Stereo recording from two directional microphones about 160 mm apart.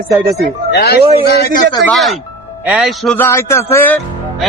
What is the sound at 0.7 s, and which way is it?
Speech, 85° left.